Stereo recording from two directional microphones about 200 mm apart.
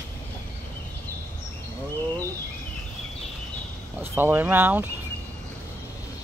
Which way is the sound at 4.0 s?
10° right (ahead or behind).